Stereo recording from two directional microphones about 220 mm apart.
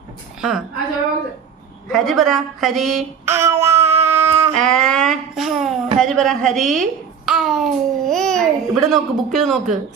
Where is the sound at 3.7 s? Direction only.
30° right (ahead or behind).